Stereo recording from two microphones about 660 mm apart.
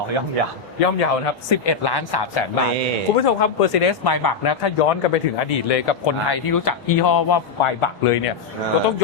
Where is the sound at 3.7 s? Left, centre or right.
Left.